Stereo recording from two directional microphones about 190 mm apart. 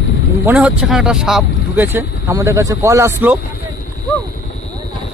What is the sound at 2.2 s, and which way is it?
Speech, 15° right (ahead or behind).